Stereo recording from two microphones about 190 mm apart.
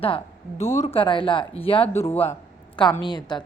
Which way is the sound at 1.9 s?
10° left (ahead or behind).